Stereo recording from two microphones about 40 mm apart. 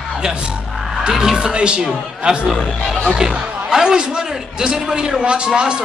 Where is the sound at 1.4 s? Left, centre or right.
Right.